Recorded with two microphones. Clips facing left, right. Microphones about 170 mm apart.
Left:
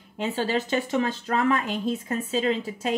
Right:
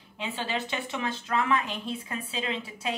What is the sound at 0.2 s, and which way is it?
Speech, 40° left (ahead or behind).